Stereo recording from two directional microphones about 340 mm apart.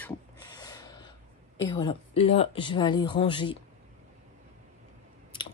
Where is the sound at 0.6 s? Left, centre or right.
Centre.